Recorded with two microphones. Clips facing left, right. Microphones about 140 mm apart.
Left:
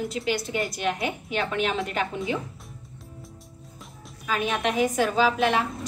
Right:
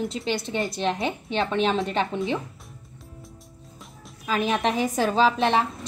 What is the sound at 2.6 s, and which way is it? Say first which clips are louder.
Music: left 1 dB; centre (ahead or behind).